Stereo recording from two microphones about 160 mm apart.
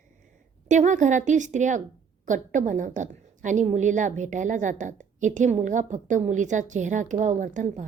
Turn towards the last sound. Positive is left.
turn(degrees=-50)  # may be behind; listen again after turning